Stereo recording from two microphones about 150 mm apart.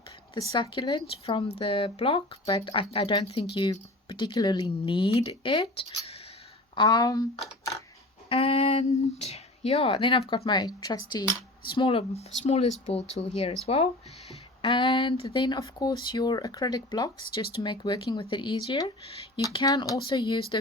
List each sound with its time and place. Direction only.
0.5 s speech: 30° left (ahead or behind)
8.3 s a sound: 40° left (ahead or behind)
9.2 s speech: 45° left (ahead or behind)